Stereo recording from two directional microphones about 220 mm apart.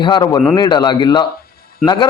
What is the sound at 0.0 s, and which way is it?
A man's voice, 20° left (ahead or behind).